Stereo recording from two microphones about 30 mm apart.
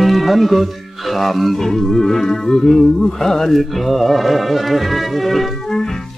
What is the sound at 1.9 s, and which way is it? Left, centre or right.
Music, centre.